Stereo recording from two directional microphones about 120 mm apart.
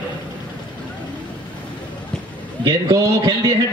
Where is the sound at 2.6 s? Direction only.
35° right (ahead or behind).